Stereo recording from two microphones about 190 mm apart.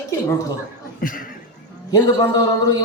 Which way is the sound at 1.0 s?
45° left (ahead or behind).